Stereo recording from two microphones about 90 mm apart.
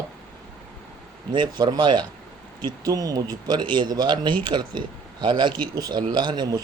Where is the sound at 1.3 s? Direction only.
60° right (ahead or behind).